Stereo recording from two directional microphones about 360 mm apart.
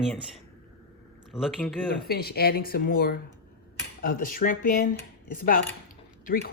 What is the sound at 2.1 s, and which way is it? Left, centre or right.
Speech, left.